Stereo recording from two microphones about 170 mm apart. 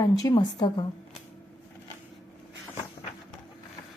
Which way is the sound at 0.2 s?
20° left (ahead or behind).